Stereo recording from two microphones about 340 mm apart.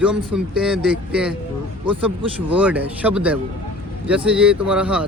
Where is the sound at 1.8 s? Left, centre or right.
Centre.